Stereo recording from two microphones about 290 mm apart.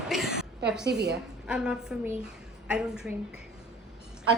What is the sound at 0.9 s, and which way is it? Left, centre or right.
Speech, right.